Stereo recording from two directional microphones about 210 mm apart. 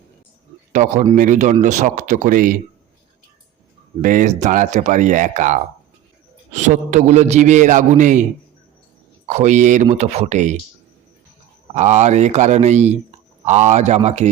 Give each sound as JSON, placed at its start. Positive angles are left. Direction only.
{"t": 0.7, "sound": "speech", "side_deg": -30}
{"t": 4.0, "sound": "speech", "side_deg": -40}
{"t": 11.7, "sound": "speech", "side_deg": -35}